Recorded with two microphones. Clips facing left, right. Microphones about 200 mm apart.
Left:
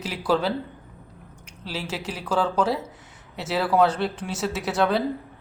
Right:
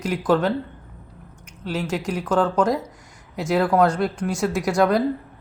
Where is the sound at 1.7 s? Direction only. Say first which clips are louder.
Right 6 dB; 5° left (ahead or behind).